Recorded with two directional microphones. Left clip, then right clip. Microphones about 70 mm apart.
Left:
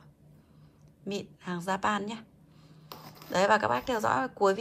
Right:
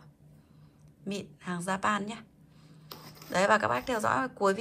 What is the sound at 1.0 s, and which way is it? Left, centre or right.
Speech, left.